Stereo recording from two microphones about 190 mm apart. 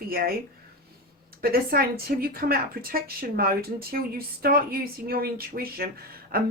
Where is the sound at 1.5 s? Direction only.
50° right (ahead or behind).